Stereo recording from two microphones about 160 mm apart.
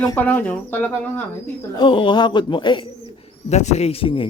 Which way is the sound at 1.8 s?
30° left (ahead or behind).